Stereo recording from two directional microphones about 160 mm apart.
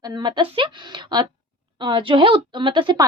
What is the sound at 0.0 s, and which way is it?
A woman's voice, 25° right (ahead or behind).